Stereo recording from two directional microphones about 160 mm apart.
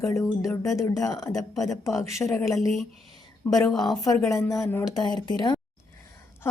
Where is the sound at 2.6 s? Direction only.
Centre (ahead or behind).